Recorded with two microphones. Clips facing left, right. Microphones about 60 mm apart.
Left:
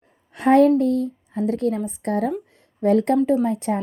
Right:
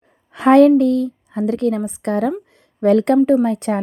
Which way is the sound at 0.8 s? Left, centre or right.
Right.